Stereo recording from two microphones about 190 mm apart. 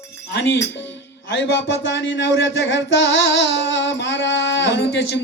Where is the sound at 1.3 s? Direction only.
75° left (ahead or behind).